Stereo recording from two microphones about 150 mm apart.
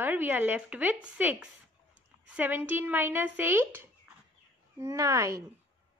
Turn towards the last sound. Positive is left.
turn(degrees=-20)  # may be behind; listen again after turning